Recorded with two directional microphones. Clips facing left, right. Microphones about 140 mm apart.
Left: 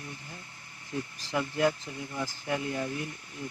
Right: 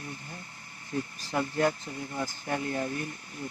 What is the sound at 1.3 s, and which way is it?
Speech, 40° right (ahead or behind).